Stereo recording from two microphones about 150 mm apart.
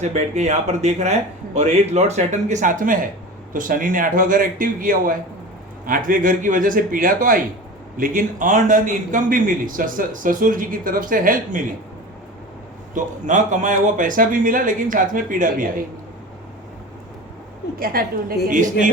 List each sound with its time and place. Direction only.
0.0 s a man's voice: 50° right (ahead or behind)
12.9 s a man's voice: 55° right (ahead or behind)
17.7 s a woman's voice: 75° right (ahead or behind)
18.4 s a man's voice: 60° right (ahead or behind)